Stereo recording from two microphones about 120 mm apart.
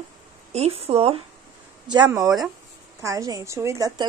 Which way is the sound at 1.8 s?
40° right (ahead or behind).